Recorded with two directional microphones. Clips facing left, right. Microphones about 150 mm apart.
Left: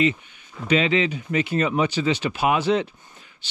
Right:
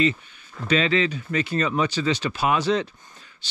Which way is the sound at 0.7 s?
15° left (ahead or behind).